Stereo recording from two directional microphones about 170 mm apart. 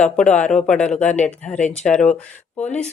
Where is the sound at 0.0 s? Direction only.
5° left (ahead or behind).